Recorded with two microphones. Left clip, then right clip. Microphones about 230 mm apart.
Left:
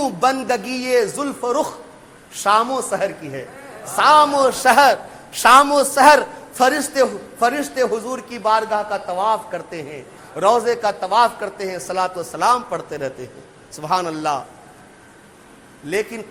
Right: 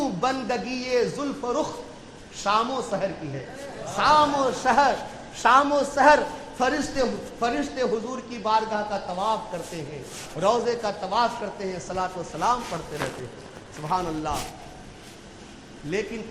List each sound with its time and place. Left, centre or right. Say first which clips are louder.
0.0 s a man's voice: left 7 dB; left
13.8 s a man's voice: left 7 dB; left